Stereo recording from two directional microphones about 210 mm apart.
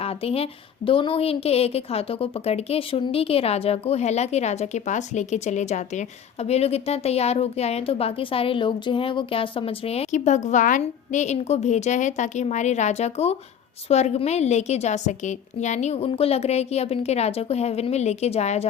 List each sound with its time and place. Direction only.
0.0 s a woman's voice: 30° left (ahead or behind)